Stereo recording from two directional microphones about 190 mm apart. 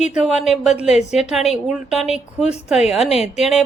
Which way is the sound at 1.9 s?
35° left (ahead or behind).